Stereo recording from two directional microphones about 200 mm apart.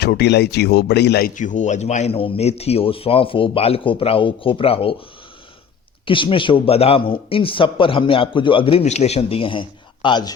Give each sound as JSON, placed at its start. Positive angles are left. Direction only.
{"t": 0.0, "sound": "speech", "side_deg": 55}
{"t": 1.4, "sound": "a man's voice", "side_deg": 40}
{"t": 6.1, "sound": "a man's voice", "side_deg": 25}